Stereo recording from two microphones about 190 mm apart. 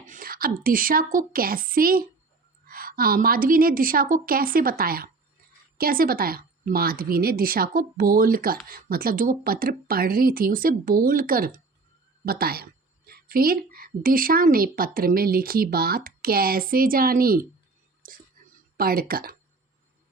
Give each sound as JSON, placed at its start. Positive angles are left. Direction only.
{"t": 0.0, "sound": "whispering", "side_deg": -45}
{"t": 0.6, "sound": "speech", "side_deg": -50}
{"t": 18.8, "sound": "speech", "side_deg": -50}